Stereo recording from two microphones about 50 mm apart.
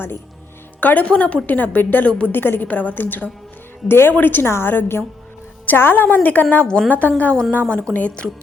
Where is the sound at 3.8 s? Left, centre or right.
Left.